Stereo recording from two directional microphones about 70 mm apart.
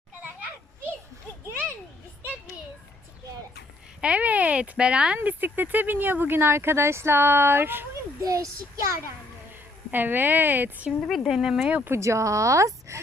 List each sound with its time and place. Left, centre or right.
4.0 s speech: centre
8.2 s speech: right
9.9 s speech: right
11.0 s speech: centre
11.3 s speech: centre
11.9 s speech: right